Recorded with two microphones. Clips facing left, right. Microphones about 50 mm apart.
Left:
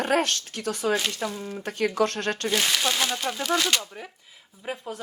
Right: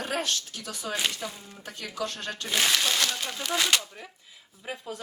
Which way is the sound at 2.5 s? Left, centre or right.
Centre.